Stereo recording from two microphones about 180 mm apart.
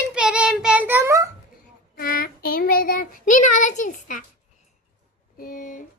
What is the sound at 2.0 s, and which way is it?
Child singing, 55° left (ahead or behind).